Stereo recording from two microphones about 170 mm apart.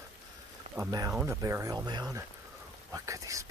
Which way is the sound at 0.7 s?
20° right (ahead or behind).